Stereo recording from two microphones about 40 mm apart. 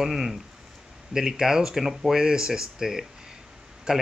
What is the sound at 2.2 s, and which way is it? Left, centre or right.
Speech, centre.